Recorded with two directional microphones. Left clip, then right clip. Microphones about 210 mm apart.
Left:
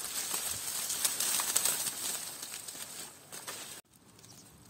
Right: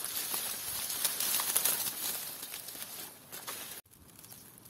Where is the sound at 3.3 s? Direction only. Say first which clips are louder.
Right 1 dB; 15° right (ahead or behind).